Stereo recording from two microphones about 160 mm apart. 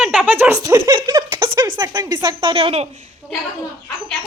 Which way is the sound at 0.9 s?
25° right (ahead or behind).